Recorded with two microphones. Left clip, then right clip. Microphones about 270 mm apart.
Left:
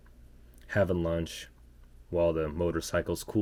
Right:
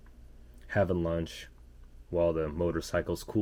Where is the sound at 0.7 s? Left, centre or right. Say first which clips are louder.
Left 1 dB; centre.